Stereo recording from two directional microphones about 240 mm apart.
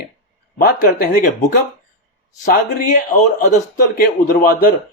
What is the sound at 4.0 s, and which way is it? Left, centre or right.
Speech, left.